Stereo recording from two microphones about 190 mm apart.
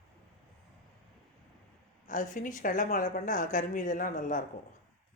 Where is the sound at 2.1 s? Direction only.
45° left (ahead or behind).